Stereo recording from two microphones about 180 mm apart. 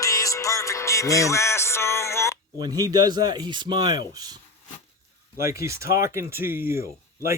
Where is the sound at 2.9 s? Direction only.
20° right (ahead or behind).